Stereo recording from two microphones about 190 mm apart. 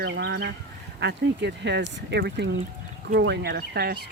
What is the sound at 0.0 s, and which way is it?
Speech, 60° right (ahead or behind).